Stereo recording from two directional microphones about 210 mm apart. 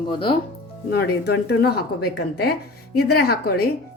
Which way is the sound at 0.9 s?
50° left (ahead or behind).